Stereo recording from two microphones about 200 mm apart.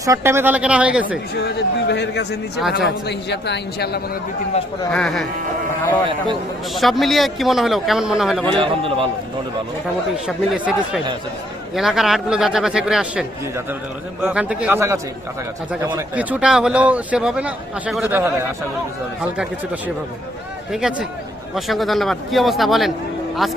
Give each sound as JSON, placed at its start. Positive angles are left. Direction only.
{"t": 0.0, "sound": "a man's voice", "side_deg": -15}
{"t": 1.5, "sound": "a man's voice", "side_deg": 55}
{"t": 4.9, "sound": "a man's voice", "side_deg": 5}
{"t": 6.7, "sound": "a man's voice", "side_deg": 0}
{"t": 8.4, "sound": "a man's voice", "side_deg": -25}
{"t": 10.2, "sound": "a man's voice", "side_deg": -5}
{"t": 20.7, "sound": "a man's voice", "side_deg": 0}